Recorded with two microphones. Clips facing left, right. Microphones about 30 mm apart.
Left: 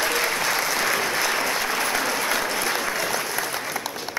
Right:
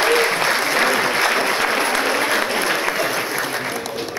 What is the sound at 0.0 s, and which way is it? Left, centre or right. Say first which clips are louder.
Applause: right 6 dB; right.